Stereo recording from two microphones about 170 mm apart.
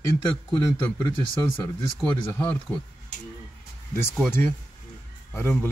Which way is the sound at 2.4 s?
10° left (ahead or behind).